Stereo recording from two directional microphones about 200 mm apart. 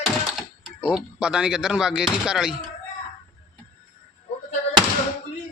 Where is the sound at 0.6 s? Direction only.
5° right (ahead or behind).